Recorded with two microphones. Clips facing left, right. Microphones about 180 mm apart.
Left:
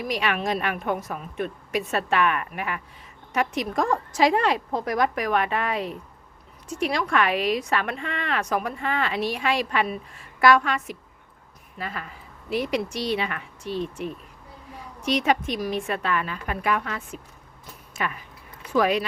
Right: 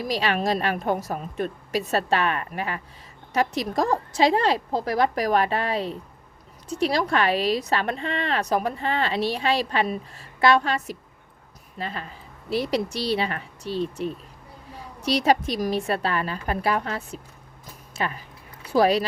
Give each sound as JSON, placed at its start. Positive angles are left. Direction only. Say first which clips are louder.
{"t": 0.0, "sound": "speech", "louder": "right 2 dB", "side_deg": -30}